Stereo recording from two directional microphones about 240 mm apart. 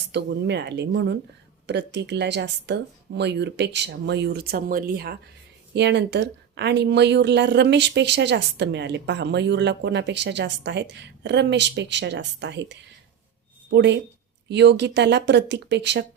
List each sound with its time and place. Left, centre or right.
0.1 s speech: right